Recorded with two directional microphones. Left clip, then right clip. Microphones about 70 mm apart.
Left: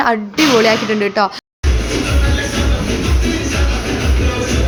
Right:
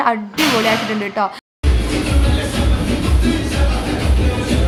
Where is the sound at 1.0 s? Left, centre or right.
Left.